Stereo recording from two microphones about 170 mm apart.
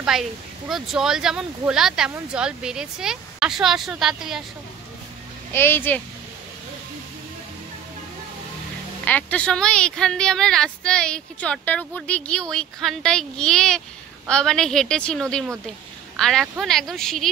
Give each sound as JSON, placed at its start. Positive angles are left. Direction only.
{"t": 0.0, "sound": "a woman's voice", "side_deg": 0}
{"t": 5.5, "sound": "speech", "side_deg": 15}
{"t": 9.0, "sound": "a woman's voice", "side_deg": 10}